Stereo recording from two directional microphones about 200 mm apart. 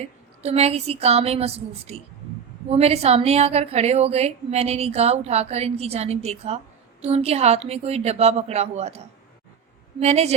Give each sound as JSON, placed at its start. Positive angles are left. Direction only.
{"t": 0.4, "sound": "a woman's voice", "side_deg": -30}
{"t": 10.0, "sound": "a woman's voice", "side_deg": -35}